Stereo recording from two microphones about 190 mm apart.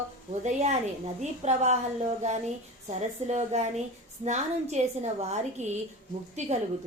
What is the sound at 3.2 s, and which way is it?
A woman's voice, 35° right (ahead or behind).